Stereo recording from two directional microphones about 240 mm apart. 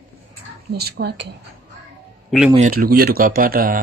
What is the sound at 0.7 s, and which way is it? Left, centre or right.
Speech, right.